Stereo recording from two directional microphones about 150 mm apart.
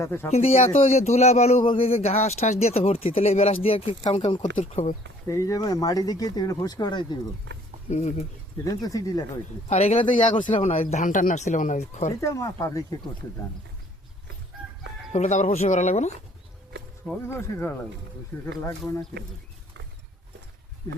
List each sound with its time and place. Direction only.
0.0 s speech: 15° left (ahead or behind)
0.3 s a man's voice: 45° left (ahead or behind)
5.3 s speech: 20° left (ahead or behind)
7.9 s a man's voice: 50° left (ahead or behind)
8.6 s speech: 25° left (ahead or behind)
9.6 s a man's voice: 45° left (ahead or behind)
10.0 s speech: 35° left (ahead or behind)
10.6 s a man's voice: 45° left (ahead or behind)
10.9 s speech: 60° left (ahead or behind)
12.2 s speech: 20° left (ahead or behind)
15.1 s a man's voice: 50° left (ahead or behind)
17.2 s speech: 20° left (ahead or behind)